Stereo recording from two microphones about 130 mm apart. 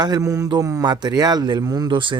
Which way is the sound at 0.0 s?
25° right (ahead or behind).